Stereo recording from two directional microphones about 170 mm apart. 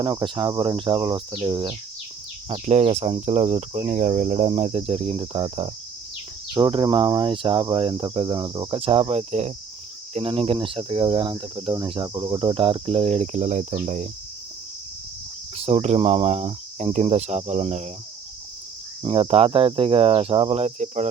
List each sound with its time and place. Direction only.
0.0 s speech: 25° right (ahead or behind)
2.5 s speech: 40° right (ahead or behind)
15.5 s speech: 40° right (ahead or behind)
19.0 s speech: 35° right (ahead or behind)